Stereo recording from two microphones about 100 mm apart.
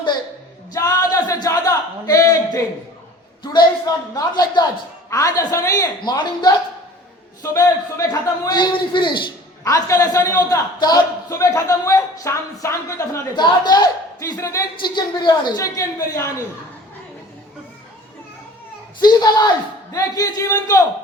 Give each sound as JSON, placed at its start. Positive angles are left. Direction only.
{"t": 0.7, "sound": "a sound", "side_deg": 35}
{"t": 3.4, "sound": "a man's voice", "side_deg": 45}
{"t": 6.0, "sound": "a man's voice", "side_deg": 45}
{"t": 7.5, "sound": "a man's voice", "side_deg": 35}
{"t": 9.6, "sound": "speech", "side_deg": 35}
{"t": 11.3, "sound": "speech", "side_deg": 30}
{"t": 13.3, "sound": "speech", "side_deg": 45}
{"t": 14.8, "sound": "speech", "side_deg": 50}
{"t": 18.9, "sound": "a man's voice", "side_deg": 45}
{"t": 19.9, "sound": "speech", "side_deg": 35}